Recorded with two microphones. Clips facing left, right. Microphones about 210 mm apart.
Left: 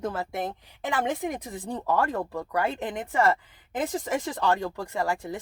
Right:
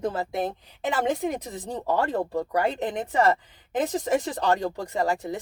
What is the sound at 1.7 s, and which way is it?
Speech, 35° right (ahead or behind).